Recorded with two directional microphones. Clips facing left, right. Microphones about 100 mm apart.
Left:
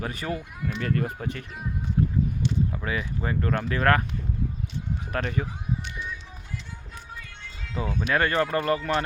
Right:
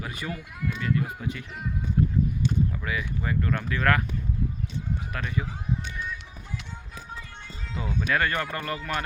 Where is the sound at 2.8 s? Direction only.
30° left (ahead or behind).